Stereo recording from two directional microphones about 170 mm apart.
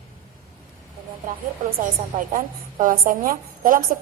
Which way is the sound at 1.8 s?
50° right (ahead or behind).